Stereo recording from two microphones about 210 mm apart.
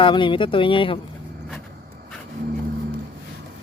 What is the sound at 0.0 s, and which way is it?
Speech, 25° left (ahead or behind).